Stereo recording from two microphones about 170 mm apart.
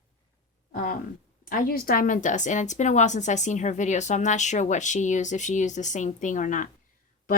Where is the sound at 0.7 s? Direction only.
55° left (ahead or behind).